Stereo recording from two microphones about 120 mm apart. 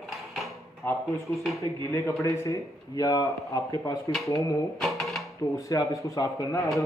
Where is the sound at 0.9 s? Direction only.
15° left (ahead or behind).